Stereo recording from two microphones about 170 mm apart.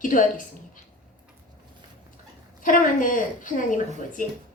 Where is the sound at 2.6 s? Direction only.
50° left (ahead or behind).